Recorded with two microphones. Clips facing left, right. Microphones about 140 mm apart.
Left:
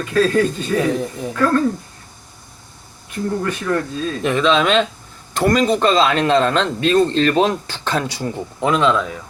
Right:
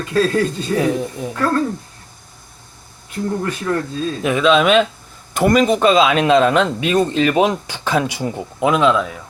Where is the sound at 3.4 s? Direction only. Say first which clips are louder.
Even; 25° right (ahead or behind).